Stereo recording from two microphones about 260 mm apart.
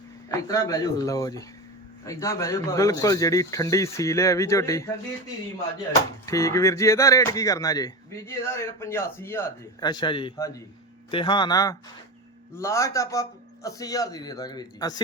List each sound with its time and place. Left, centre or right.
0.3 s speech: centre
6.2 s speech: centre